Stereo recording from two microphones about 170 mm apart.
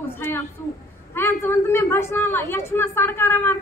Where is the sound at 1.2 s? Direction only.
15° left (ahead or behind).